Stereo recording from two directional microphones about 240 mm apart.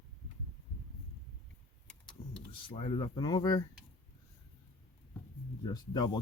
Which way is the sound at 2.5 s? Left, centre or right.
Left.